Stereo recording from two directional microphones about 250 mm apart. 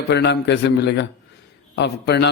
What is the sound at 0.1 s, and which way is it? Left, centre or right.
A man's voice, left.